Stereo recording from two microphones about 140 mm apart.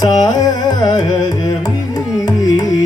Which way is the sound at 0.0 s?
25° left (ahead or behind).